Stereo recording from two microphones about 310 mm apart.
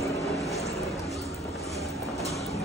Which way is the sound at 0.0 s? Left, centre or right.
Centre.